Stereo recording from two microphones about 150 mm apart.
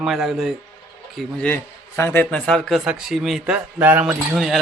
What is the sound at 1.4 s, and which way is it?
A man's voice, 15° left (ahead or behind).